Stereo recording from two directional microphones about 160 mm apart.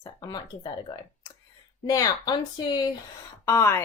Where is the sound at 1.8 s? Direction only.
25° left (ahead or behind).